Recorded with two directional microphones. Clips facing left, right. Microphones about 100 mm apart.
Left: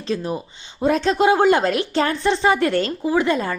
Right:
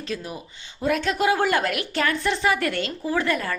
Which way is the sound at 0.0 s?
30° left (ahead or behind).